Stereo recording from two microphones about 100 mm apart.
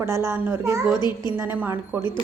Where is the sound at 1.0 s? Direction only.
45° left (ahead or behind).